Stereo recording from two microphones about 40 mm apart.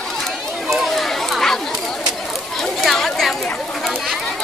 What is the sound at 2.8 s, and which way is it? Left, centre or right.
Chatter, centre.